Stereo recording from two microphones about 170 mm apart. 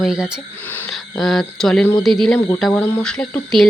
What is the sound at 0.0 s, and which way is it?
Speech, 5° right (ahead or behind).